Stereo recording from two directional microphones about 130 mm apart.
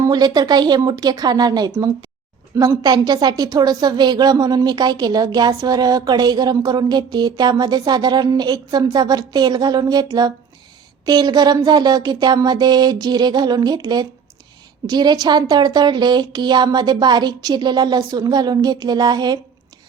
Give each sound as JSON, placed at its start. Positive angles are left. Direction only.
{"t": 0.0, "sound": "a woman's voice", "side_deg": -30}